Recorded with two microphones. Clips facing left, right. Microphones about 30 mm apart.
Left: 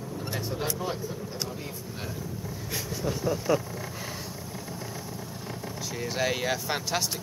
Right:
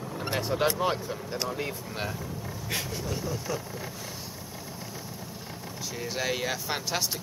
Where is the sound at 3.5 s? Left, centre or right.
Centre.